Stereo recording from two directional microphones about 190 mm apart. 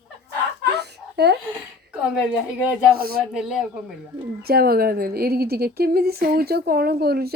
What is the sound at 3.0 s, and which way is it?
Speech, 50° right (ahead or behind).